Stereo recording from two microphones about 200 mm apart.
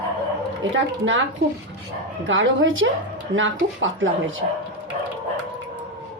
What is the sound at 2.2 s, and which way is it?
Speech, 75° right (ahead or behind).